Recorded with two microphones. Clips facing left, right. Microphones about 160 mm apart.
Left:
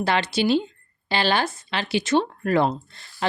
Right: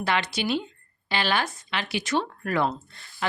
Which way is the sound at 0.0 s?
30° left (ahead or behind).